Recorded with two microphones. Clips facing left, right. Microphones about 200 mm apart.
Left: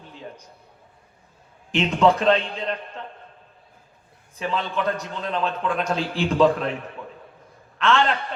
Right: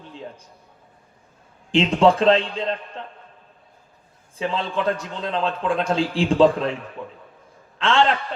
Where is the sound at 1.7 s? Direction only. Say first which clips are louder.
Right 2 dB; 30° right (ahead or behind).